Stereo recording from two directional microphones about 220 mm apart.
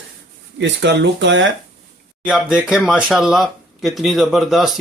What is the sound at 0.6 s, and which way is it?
Speech, 55° right (ahead or behind).